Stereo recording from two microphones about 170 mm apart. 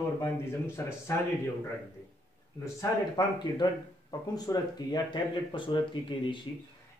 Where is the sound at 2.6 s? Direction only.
20° left (ahead or behind).